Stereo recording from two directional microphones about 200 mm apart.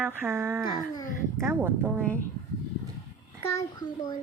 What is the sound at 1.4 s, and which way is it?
Speech, 10° right (ahead or behind).